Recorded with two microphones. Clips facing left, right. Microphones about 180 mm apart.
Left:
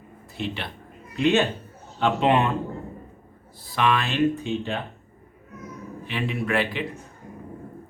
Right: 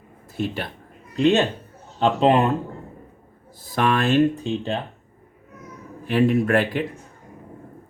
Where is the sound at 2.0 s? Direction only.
40° right (ahead or behind).